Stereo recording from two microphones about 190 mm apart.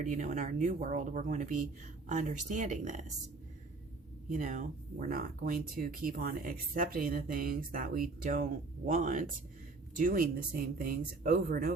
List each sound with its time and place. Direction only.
0.0 s speech: 40° right (ahead or behind)
4.3 s speech: 40° right (ahead or behind)